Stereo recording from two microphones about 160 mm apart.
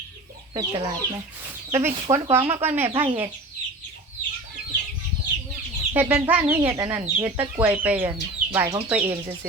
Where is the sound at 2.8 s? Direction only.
35° right (ahead or behind).